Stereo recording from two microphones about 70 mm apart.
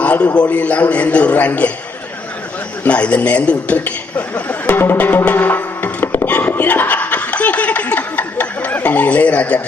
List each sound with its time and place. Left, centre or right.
0.0 s a sound: centre
0.3 s a man's voice: centre
2.8 s a man's voice: centre
4.6 s music: left